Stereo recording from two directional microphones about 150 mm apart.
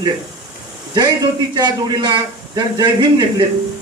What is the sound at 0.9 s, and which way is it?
A man's voice, 30° right (ahead or behind).